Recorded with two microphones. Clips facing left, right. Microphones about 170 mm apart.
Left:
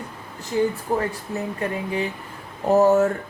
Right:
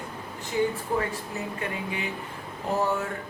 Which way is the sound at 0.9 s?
40° left (ahead or behind).